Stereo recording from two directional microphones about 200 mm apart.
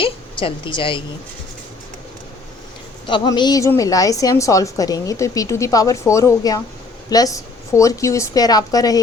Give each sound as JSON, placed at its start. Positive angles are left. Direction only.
{"t": 0.0, "sound": "a woman's voice", "side_deg": 25}
{"t": 3.1, "sound": "a woman's voice", "side_deg": 25}